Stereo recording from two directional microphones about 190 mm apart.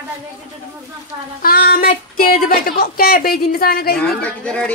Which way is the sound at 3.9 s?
5° left (ahead or behind).